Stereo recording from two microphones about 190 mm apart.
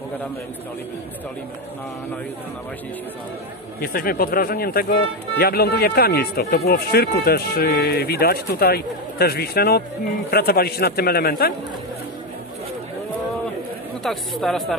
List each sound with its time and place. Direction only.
3.8 s a man's voice: 50° left (ahead or behind)
14.0 s speech: centre (ahead or behind)